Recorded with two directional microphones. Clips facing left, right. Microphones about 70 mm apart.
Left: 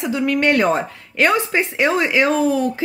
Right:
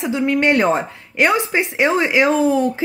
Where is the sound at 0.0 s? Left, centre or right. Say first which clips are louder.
Right 1 dB; right.